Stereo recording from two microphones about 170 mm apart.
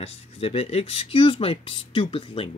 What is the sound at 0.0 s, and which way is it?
Speech, 35° left (ahead or behind).